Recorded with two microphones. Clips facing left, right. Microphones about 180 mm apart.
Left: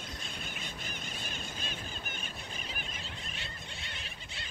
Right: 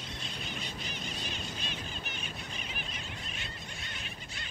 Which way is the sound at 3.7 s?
25° left (ahead or behind).